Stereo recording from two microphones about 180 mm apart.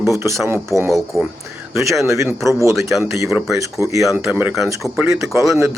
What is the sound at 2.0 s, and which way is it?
Speech, 15° right (ahead or behind).